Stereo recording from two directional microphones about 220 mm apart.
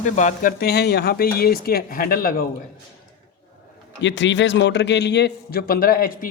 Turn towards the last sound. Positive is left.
turn(degrees=40)  # may be behind; listen again after turning